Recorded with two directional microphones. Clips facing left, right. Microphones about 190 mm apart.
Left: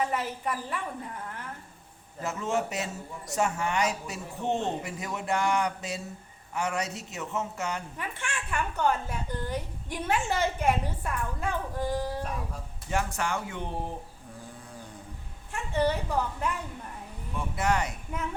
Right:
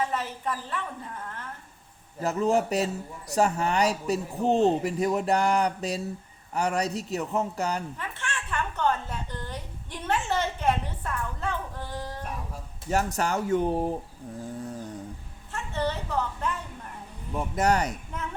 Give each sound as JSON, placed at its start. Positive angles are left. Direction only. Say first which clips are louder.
{"t": 0.1, "sound": "speech", "louder": "even", "side_deg": 10}
{"t": 2.2, "sound": "a man's voice", "louder": "right 6 dB", "side_deg": -35}
{"t": 7.9, "sound": "a sound", "louder": "right 1 dB", "side_deg": 10}
{"t": 12.9, "sound": "a man's voice", "louder": "right 4 dB", "side_deg": -40}
{"t": 15.5, "sound": "a woman's voice", "louder": "left 3 dB", "side_deg": 15}
{"t": 17.3, "sound": "a man's voice", "louder": "right 4 dB", "side_deg": -40}